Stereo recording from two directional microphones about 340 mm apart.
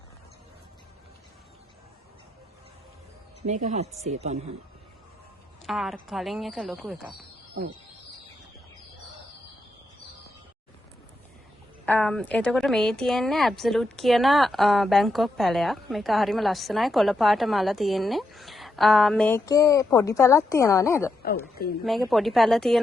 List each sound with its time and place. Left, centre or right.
3.4 s speech: right
5.6 s speech: centre
11.9 s speech: centre
22.1 s speech: centre